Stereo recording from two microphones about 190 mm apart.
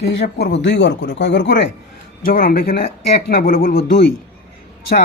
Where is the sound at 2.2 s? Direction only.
50° left (ahead or behind).